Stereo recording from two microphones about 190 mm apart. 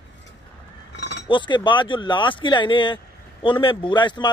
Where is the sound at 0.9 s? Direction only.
60° left (ahead or behind).